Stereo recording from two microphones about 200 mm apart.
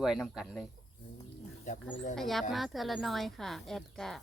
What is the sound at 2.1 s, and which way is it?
A woman's voice, centre (ahead or behind).